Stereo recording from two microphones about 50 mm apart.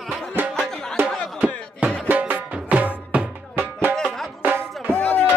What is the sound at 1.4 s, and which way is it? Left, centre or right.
Music, right.